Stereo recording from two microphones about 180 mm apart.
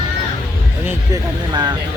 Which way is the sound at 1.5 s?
25° right (ahead or behind).